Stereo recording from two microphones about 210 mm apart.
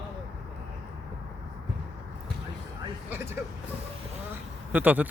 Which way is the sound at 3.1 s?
10° right (ahead or behind).